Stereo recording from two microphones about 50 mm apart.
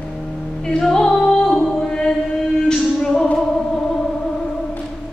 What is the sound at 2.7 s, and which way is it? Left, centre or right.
Singing, centre.